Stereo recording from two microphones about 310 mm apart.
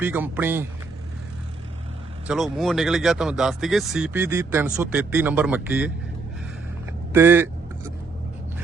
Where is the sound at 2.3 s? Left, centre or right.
Centre.